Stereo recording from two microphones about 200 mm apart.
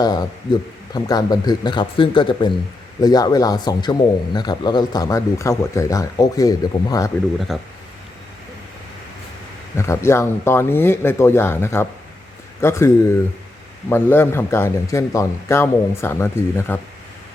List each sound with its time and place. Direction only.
0.0 s a man's voice: 20° left (ahead or behind)
7.3 s speech: centre (ahead or behind)
9.7 s a man's voice: 15° left (ahead or behind)